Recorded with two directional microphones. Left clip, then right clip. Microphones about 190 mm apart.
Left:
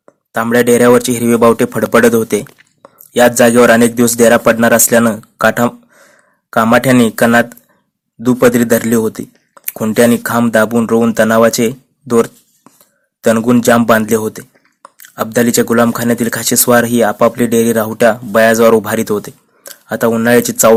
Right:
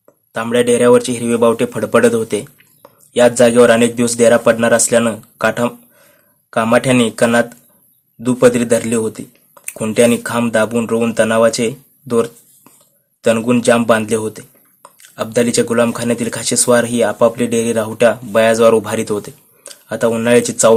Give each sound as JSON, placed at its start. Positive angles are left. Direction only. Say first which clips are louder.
{"t": 0.0, "sound": "speech", "louder": "left 5 dB", "side_deg": 30}